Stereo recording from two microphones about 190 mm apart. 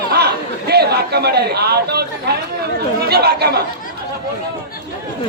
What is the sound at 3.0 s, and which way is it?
Speech, 60° right (ahead or behind).